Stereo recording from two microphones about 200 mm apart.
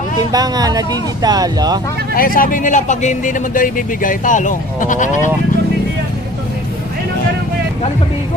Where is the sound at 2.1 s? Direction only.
45° left (ahead or behind).